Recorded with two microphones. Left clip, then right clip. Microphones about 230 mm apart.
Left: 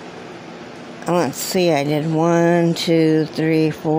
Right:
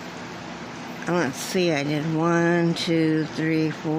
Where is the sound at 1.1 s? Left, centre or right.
Left.